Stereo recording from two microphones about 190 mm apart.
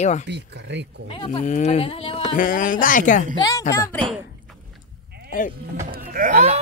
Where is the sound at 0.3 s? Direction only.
65° right (ahead or behind).